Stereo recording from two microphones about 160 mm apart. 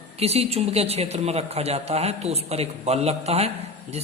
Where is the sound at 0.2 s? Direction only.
40° right (ahead or behind).